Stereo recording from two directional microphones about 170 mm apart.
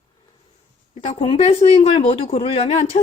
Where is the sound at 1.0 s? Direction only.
35° left (ahead or behind).